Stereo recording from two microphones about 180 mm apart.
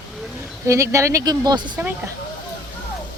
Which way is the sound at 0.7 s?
15° right (ahead or behind).